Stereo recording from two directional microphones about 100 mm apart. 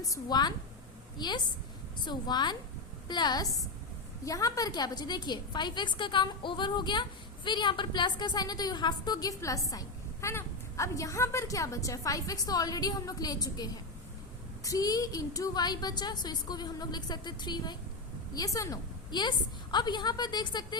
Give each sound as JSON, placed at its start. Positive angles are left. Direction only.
{"t": 0.0, "sound": "a woman's voice", "side_deg": 40}
{"t": 18.3, "sound": "a woman's voice", "side_deg": 35}
{"t": 19.1, "sound": "a woman's voice", "side_deg": 45}